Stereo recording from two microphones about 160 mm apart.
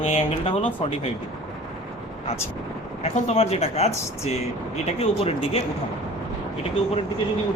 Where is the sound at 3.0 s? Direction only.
40° left (ahead or behind).